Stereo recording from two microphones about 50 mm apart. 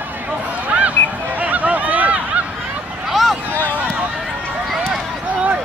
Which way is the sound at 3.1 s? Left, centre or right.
Centre.